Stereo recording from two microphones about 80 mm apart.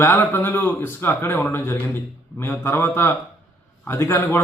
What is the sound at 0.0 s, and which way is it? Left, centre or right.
Speech, left.